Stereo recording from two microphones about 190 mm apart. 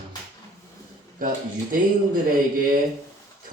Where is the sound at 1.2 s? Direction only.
50° right (ahead or behind).